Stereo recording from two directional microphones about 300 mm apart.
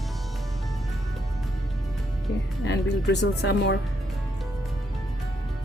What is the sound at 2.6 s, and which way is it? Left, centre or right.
Speech, left.